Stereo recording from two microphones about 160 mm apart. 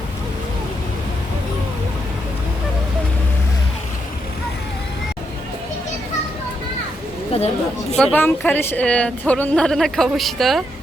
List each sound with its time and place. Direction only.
7.3 s speech: 40° left (ahead or behind)
7.9 s a woman's voice: 10° left (ahead or behind)